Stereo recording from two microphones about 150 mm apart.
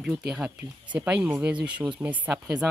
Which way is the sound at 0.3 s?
5° right (ahead or behind).